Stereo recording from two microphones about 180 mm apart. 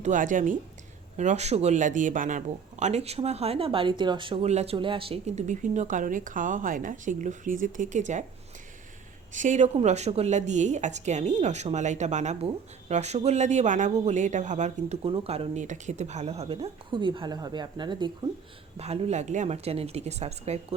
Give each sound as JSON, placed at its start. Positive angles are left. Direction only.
{"t": 0.0, "sound": "a woman's voice", "side_deg": -45}
{"t": 9.3, "sound": "a woman's voice", "side_deg": -45}
{"t": 18.8, "sound": "speech", "side_deg": -35}